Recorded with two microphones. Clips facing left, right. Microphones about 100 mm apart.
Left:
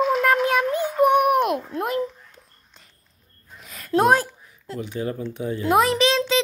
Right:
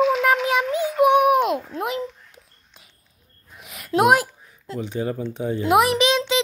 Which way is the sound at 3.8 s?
10° right (ahead or behind).